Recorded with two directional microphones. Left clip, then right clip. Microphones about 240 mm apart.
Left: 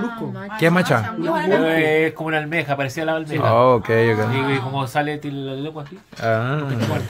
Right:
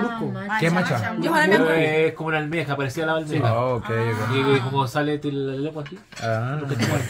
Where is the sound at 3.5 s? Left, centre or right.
Left.